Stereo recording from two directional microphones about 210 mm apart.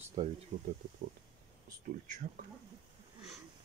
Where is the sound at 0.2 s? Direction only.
20° right (ahead or behind).